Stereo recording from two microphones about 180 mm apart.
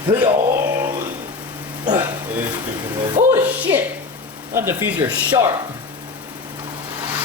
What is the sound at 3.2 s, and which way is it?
Music, 45° right (ahead or behind).